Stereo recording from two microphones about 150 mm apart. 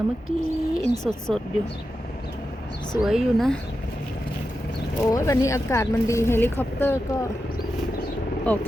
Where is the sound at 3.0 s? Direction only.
5° right (ahead or behind).